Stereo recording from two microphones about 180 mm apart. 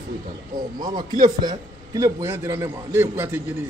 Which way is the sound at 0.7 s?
45° right (ahead or behind).